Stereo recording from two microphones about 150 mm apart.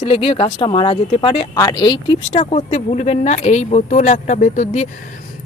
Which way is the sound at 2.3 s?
45° left (ahead or behind).